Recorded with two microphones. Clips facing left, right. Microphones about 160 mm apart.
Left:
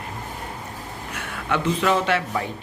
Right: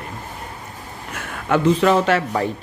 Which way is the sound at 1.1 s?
40° right (ahead or behind).